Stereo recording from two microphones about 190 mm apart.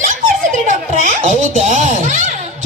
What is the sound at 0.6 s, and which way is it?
Speech, 40° right (ahead or behind).